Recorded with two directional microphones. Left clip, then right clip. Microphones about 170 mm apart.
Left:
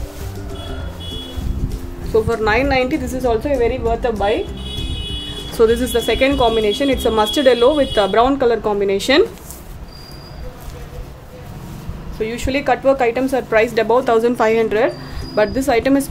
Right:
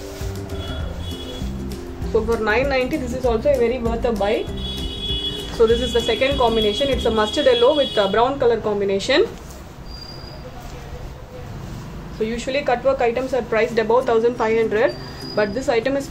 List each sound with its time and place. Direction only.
2.1 s a woman's voice: 70° left (ahead or behind)
5.6 s a woman's voice: 75° left (ahead or behind)
12.2 s a woman's voice: 75° left (ahead or behind)